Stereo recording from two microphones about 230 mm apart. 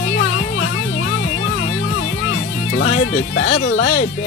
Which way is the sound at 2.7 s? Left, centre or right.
Left.